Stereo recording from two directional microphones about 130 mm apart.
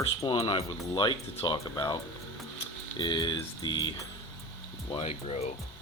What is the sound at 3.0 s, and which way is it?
Speech, 35° left (ahead or behind).